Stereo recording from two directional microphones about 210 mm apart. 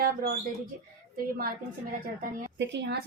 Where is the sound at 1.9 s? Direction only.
40° right (ahead or behind).